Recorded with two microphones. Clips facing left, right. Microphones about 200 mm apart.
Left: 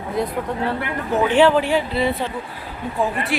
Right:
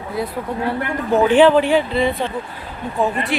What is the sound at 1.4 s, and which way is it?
A woman's voice, 5° left (ahead or behind).